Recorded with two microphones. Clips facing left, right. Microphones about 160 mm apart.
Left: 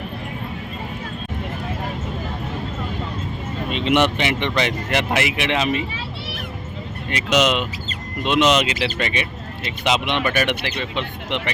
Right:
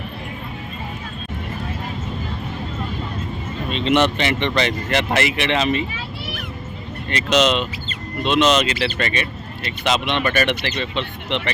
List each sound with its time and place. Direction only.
3.7 s speech: 10° left (ahead or behind)
7.1 s speech: 10° left (ahead or behind)